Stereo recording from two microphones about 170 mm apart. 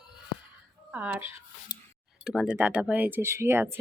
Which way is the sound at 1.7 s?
25° left (ahead or behind).